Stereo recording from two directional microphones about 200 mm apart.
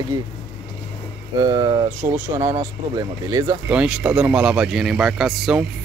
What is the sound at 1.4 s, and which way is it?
Speech, 20° right (ahead or behind).